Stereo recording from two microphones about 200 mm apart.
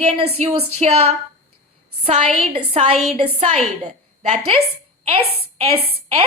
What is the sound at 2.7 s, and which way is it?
Speech, 30° right (ahead or behind).